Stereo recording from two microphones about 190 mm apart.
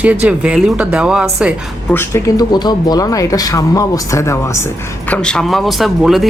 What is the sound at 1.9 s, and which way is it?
Speech, 10° left (ahead or behind).